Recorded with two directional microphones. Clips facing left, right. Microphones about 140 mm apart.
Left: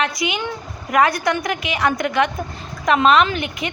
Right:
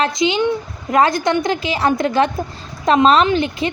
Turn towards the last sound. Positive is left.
turn(degrees=-30)  # may be behind; listen again after turning